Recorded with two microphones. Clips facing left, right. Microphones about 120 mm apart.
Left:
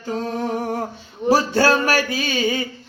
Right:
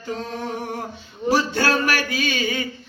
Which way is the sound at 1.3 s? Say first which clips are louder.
Left 4 dB; 30° left (ahead or behind).